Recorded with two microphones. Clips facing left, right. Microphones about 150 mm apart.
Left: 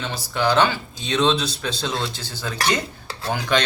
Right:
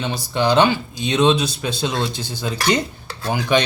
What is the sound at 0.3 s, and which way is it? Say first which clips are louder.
Speech: right 3 dB; 15° right (ahead or behind).